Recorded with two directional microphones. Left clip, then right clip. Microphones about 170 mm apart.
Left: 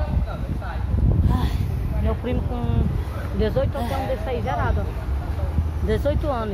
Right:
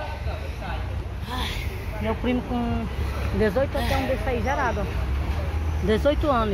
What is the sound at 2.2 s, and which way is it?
Speech, 45° right (ahead or behind).